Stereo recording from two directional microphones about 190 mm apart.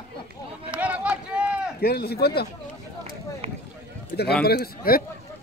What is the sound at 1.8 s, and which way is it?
Speech, 55° left (ahead or behind).